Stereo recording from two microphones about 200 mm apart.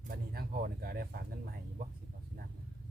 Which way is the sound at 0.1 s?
45° right (ahead or behind).